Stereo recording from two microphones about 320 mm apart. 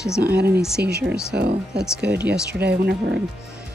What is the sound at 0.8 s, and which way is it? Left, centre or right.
Speech, right.